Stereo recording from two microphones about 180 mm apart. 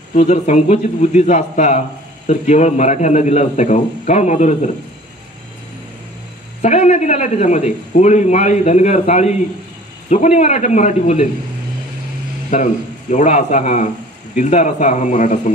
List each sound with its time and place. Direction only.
0.1 s a man's voice: 40° left (ahead or behind)
6.6 s a man's voice: 40° left (ahead or behind)
12.5 s a man's voice: 40° left (ahead or behind)